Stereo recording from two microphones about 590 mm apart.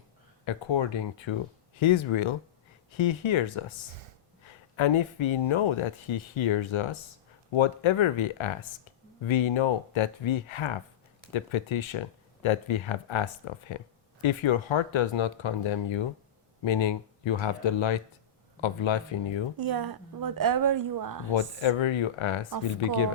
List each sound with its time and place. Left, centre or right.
0.4 s speech: left
4.8 s speech: left
19.5 s a woman's voice: right
21.2 s speech: left